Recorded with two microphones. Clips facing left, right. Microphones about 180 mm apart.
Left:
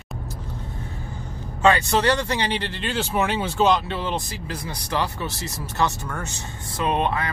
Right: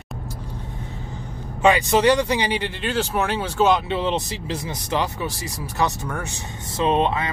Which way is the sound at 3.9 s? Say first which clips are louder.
Right 4 dB; 20° right (ahead or behind).